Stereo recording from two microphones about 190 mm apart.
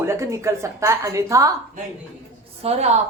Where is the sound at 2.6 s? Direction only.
35° right (ahead or behind).